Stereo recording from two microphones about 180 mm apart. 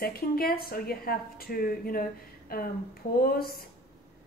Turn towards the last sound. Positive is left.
turn(degrees=55)  # may be behind; listen again after turning